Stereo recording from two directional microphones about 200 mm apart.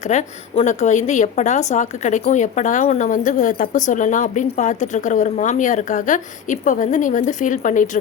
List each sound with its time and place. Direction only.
0.0 s a woman's voice: 35° left (ahead or behind)